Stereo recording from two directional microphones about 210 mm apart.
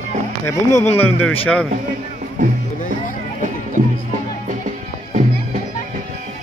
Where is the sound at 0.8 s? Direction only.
10° left (ahead or behind).